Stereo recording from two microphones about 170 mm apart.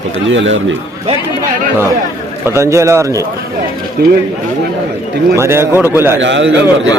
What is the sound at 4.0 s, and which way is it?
Speech, 70° right (ahead or behind).